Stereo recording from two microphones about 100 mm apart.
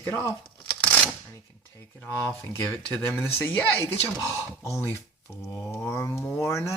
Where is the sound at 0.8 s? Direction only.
10° left (ahead or behind).